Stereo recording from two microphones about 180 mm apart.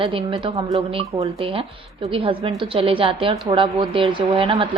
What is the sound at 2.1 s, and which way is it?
A woman's voice, 30° right (ahead or behind).